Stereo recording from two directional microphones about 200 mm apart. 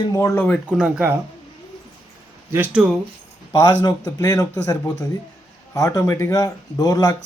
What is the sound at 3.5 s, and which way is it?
Speech, 20° left (ahead or behind).